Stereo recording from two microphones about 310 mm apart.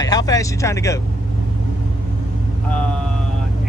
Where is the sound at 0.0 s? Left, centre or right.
Centre.